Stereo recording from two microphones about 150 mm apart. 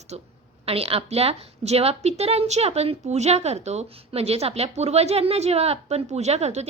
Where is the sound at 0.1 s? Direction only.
45° right (ahead or behind).